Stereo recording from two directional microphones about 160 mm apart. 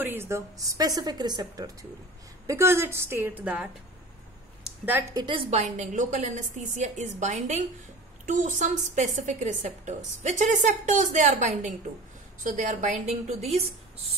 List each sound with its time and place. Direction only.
0.0 s a woman's voice: 15° right (ahead or behind)
5.1 s a woman's voice: 30° right (ahead or behind)